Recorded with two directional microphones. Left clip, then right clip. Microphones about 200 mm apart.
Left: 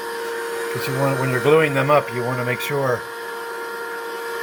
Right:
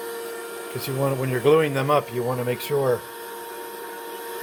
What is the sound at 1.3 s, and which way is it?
Speech, 15° right (ahead or behind).